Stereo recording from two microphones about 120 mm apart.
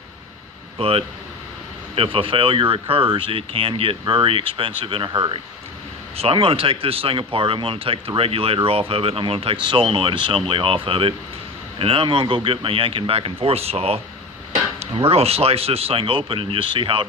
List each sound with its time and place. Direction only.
0.7 s speech: 55° right (ahead or behind)
6.1 s speech: 50° right (ahead or behind)